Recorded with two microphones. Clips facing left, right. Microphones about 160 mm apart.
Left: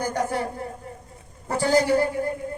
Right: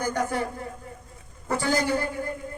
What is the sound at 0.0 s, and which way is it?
Speech, 30° left (ahead or behind).